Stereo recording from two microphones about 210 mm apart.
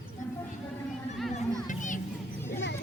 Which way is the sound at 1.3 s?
35° left (ahead or behind).